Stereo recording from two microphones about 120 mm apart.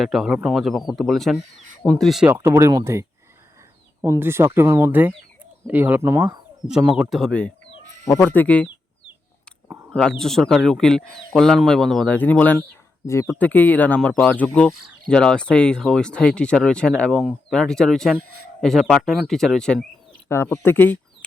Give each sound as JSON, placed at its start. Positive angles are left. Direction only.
{"t": 0.0, "sound": "speech", "side_deg": 0}
{"t": 2.3, "sound": "speech", "side_deg": -20}
{"t": 6.9, "sound": "speech", "side_deg": 0}
{"t": 9.9, "sound": "speech", "side_deg": 5}
{"t": 20.2, "sound": "speech", "side_deg": 20}